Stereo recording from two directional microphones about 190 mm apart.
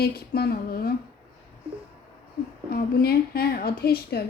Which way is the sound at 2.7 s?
55° left (ahead or behind).